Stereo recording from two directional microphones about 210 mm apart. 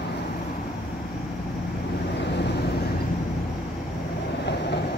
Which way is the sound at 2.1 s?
55° left (ahead or behind).